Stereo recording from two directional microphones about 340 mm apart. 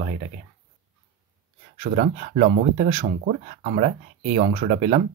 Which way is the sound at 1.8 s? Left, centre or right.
Right.